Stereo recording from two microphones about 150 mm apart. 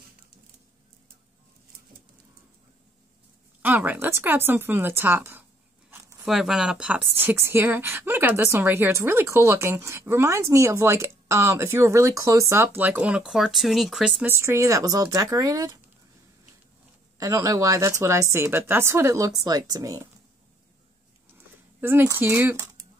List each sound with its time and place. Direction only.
3.6 s speech: 10° right (ahead or behind)
6.2 s speech: centre (ahead or behind)
14.2 s speech: 15° right (ahead or behind)
17.2 s speech: 20° right (ahead or behind)
21.8 s speech: 15° right (ahead or behind)